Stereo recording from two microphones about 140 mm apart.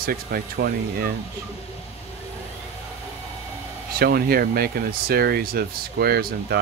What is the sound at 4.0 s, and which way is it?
Speech, 90° right.